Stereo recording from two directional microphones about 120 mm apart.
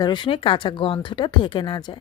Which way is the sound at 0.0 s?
45° left (ahead or behind).